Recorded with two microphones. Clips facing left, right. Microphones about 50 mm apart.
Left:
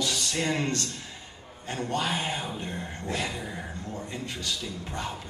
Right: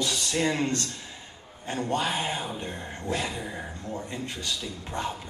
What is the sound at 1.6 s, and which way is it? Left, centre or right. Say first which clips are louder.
A man's voice: right 2 dB; right.